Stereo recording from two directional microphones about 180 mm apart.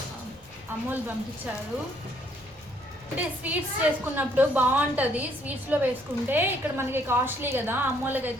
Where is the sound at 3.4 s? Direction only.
10° right (ahead or behind).